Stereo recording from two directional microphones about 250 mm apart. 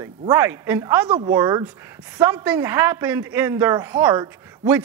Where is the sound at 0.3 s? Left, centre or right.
Centre.